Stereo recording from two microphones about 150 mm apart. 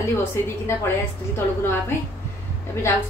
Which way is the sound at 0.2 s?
15° left (ahead or behind).